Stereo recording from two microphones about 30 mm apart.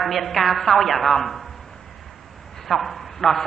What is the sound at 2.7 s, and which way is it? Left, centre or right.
Speech, centre.